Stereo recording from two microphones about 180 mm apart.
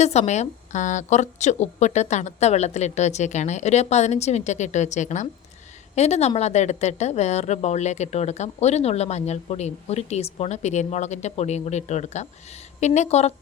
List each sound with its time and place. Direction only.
0.0 s speech: 40° left (ahead or behind)